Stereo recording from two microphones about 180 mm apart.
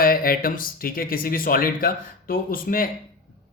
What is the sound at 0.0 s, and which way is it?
Speech, 55° left (ahead or behind).